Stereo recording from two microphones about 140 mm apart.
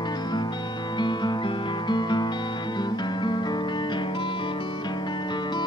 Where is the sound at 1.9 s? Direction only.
30° left (ahead or behind).